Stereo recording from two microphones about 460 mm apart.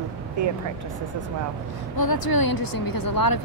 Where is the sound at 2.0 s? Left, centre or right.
Left.